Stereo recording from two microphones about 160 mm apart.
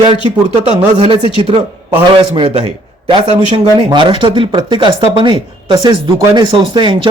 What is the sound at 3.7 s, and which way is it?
Speech, 30° right (ahead or behind).